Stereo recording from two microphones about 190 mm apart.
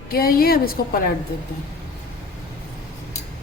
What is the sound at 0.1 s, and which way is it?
Speech, 50° left (ahead or behind).